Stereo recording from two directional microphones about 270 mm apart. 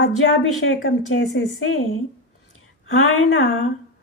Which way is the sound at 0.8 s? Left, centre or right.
Left.